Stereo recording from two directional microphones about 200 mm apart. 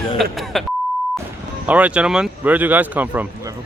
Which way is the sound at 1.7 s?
5° right (ahead or behind).